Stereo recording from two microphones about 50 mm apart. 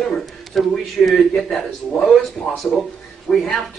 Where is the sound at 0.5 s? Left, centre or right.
Centre.